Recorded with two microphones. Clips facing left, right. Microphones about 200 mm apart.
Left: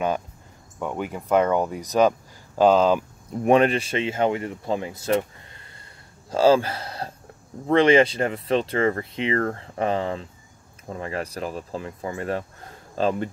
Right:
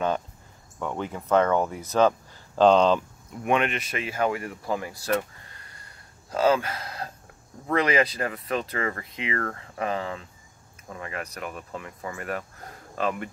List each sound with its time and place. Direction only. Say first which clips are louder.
0.7 s speech: left 2 dB; 15° left (ahead or behind)
3.4 s speech: left 7 dB; 35° left (ahead or behind)